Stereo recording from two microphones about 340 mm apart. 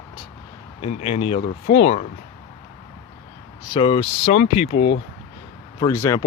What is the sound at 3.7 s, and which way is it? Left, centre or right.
Speech, centre.